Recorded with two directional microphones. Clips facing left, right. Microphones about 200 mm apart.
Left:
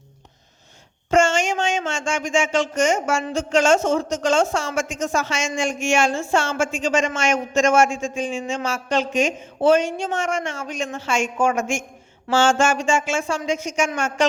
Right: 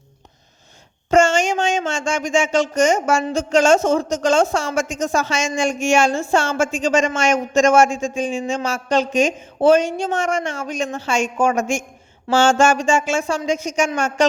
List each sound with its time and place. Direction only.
1.1 s speech: 40° right (ahead or behind)